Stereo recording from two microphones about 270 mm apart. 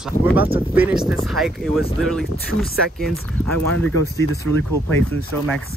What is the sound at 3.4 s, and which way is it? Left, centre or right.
Speech, right.